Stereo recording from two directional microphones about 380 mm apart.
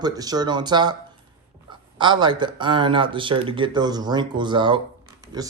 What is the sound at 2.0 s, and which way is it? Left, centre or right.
Speech, centre.